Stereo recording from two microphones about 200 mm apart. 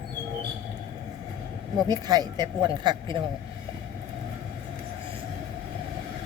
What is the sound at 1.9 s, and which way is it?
Speech, 20° right (ahead or behind).